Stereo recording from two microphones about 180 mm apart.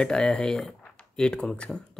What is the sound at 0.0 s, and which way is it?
Speech, 5° left (ahead or behind).